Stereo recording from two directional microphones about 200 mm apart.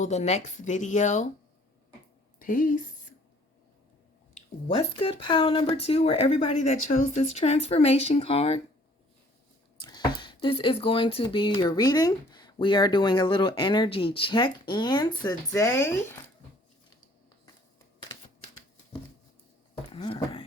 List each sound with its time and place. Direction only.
0.0 s speech: 35° left (ahead or behind)
2.4 s speech: 40° left (ahead or behind)
4.7 s speech: 30° left (ahead or behind)
9.8 s speech: 20° left (ahead or behind)
19.9 s speech: 20° left (ahead or behind)